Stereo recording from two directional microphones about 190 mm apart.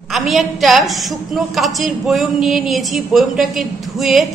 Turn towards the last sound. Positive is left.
turn(degrees=0)  # may be behind; listen again after turning